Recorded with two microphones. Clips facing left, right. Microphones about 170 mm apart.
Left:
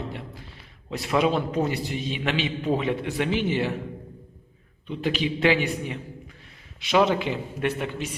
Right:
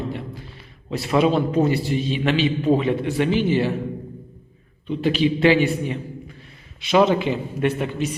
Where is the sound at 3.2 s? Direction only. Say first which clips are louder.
Right 5 dB; 20° left (ahead or behind).